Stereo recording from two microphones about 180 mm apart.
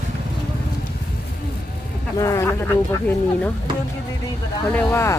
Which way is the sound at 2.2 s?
15° left (ahead or behind).